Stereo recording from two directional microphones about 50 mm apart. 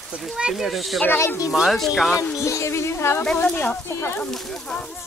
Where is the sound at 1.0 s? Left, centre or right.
Left.